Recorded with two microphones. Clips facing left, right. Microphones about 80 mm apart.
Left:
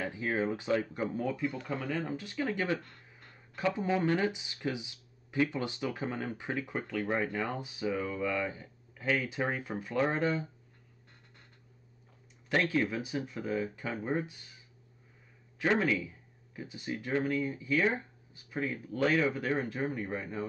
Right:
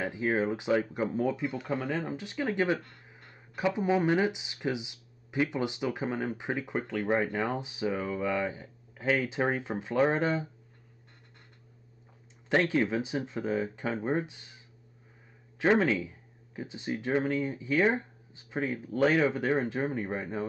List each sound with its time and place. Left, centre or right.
0.0 s speech: right
12.4 s speech: right
15.8 s speech: right